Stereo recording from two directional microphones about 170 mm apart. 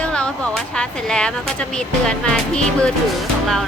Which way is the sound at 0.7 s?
5° left (ahead or behind).